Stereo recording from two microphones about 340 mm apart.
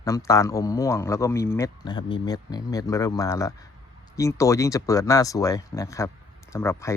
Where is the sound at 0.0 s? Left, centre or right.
Centre.